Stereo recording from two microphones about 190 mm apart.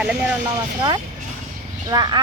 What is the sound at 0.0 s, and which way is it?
Speech, 5° right (ahead or behind).